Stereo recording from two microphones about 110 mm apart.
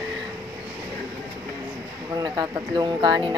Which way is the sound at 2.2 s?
40° right (ahead or behind).